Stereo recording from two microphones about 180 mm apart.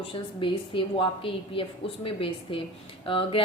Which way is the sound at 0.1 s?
30° left (ahead or behind).